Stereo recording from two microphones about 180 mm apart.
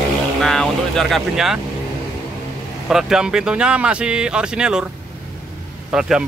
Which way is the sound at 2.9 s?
5° right (ahead or behind).